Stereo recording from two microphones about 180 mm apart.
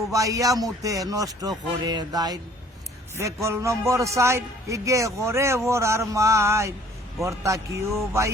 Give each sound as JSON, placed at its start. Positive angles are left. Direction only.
{"t": 0.1, "sound": "a man's voice", "side_deg": -20}